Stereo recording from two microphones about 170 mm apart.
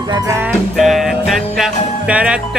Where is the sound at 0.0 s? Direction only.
20° right (ahead or behind).